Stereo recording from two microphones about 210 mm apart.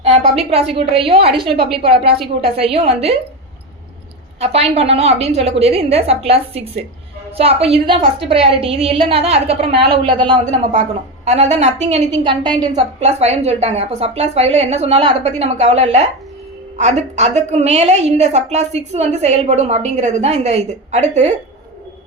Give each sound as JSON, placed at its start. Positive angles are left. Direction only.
{"t": 0.0, "sound": "a woman's voice", "side_deg": -30}
{"t": 4.4, "sound": "a woman's voice", "side_deg": -30}
{"t": 10.4, "sound": "a woman's voice", "side_deg": -35}
{"t": 13.0, "sound": "a woman's voice", "side_deg": -30}